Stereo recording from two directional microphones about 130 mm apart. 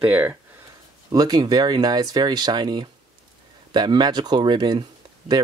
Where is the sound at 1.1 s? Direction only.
30° right (ahead or behind).